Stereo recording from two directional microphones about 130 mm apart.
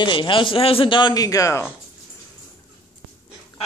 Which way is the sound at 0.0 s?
40° left (ahead or behind).